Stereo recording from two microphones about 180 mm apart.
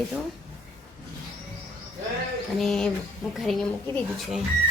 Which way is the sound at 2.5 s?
Centre (ahead or behind).